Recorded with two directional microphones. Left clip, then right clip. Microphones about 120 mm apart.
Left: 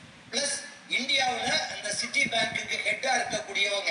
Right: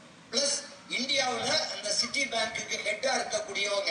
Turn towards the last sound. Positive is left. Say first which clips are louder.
# left 2 dB
turn(degrees=15)  # may be behind; listen again after turning